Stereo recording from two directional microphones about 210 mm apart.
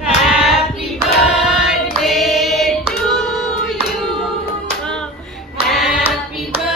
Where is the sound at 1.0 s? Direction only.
Centre (ahead or behind).